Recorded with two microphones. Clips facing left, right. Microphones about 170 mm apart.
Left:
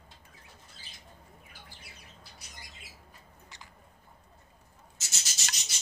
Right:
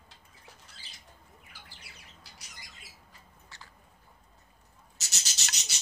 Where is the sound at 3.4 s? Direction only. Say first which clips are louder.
Even; 15° left (ahead or behind).